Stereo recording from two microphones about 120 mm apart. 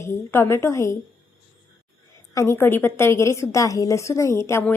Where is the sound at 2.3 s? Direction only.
20° left (ahead or behind).